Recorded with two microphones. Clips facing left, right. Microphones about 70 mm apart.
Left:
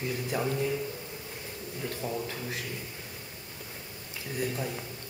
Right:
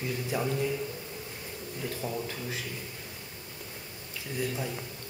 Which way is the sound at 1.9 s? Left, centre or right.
Centre.